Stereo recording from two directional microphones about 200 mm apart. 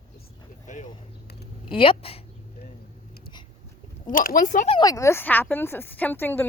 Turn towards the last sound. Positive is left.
turn(degrees=10)  # may be behind; listen again after turning